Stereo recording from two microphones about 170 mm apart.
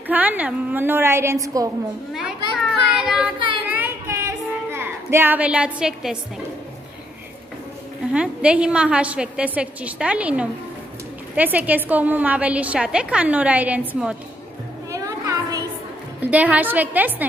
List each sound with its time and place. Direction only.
0.1 s a woman's voice: 10° right (ahead or behind)
2.1 s a sound: 5° right (ahead or behind)
3.6 s child singing: 10° right (ahead or behind)
8.1 s a woman's voice: 5° right (ahead or behind)
14.9 s children playing: 20° right (ahead or behind)
16.2 s a woman's voice: 10° right (ahead or behind)